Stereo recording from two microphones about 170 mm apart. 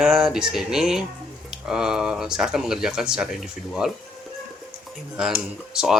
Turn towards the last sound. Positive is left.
turn(degrees=-5)  # may be behind; listen again after turning